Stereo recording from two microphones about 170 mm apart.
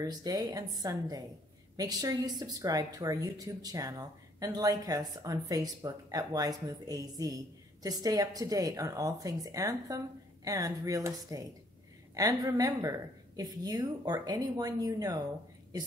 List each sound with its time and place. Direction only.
0.0 s a woman's voice: 20° right (ahead or behind)